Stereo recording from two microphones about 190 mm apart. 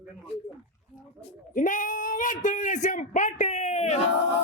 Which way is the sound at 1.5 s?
45° left (ahead or behind).